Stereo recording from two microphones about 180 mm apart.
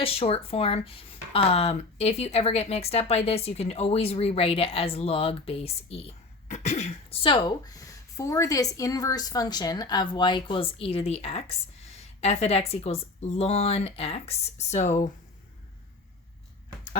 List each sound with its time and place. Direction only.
0.0 s speech: 30° left (ahead or behind)